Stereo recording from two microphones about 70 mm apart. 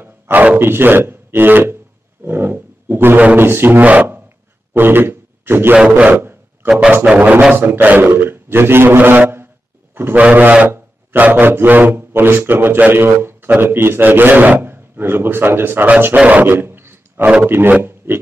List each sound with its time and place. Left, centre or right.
0.0 s speech: right
2.2 s wild animals: right
3.3 s a man's voice: right
6.8 s speech: right
7.5 s a man's voice: right
16.5 s a sound: right
17.4 s a man's voice: right
17.8 s a sound: right